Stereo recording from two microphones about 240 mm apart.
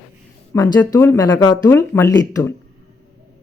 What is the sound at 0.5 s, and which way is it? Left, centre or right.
Speech, centre.